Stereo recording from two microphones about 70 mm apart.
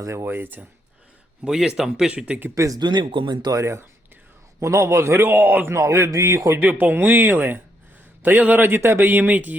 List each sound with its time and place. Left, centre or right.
0.0 s speech: right
0.3 s speech: right
1.5 s speech: centre
2.1 s speech: centre
2.6 s speech: right
2.8 s speech: right
3.6 s a man's voice: right
5.7 s speech: right
6.6 s speech: right